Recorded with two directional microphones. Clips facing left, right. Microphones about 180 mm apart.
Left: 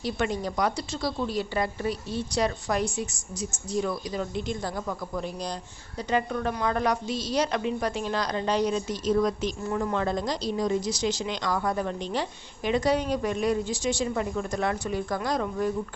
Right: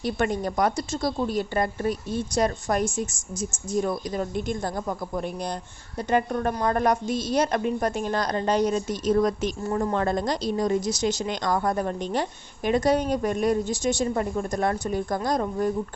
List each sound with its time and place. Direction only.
0.0 s speech: 55° right (ahead or behind)
4.9 s a man's voice: 35° right (ahead or behind)
5.2 s a man's voice: 55° right (ahead or behind)
9.6 s speech: 35° right (ahead or behind)